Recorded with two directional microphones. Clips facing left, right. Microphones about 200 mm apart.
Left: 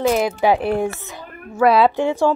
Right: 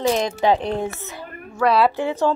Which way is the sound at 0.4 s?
10° left (ahead or behind).